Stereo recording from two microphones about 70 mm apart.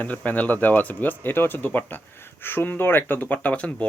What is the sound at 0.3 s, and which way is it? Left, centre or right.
Speech, left.